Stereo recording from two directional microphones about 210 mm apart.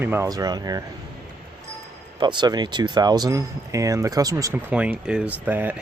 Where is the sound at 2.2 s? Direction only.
20° right (ahead or behind).